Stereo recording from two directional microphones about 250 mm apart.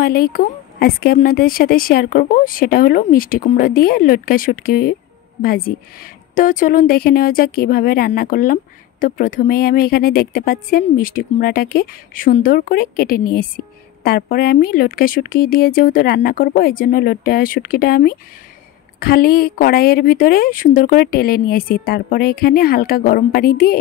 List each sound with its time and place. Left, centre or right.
0.0 s a woman's voice: left